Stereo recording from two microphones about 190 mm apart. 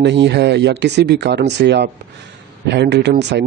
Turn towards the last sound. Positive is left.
turn(degrees=-65)  # may be behind; listen again after turning